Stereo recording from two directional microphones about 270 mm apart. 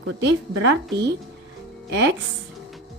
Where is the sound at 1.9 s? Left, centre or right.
Right.